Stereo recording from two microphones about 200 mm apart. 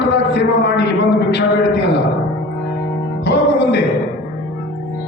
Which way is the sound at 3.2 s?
60° left (ahead or behind).